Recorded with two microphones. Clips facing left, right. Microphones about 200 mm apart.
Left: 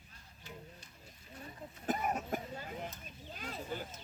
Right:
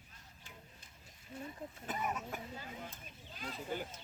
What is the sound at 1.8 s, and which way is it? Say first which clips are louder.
Cough: left 5 dB; 45° left (ahead or behind).